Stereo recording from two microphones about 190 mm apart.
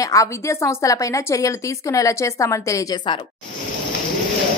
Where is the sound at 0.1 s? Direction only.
15° left (ahead or behind).